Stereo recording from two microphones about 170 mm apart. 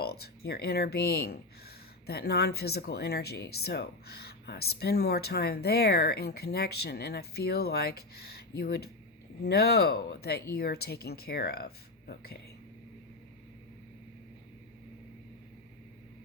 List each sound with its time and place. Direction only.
0.0 s speech: 65° left (ahead or behind)